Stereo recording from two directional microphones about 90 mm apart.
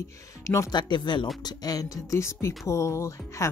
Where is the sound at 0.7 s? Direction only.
55° left (ahead or behind).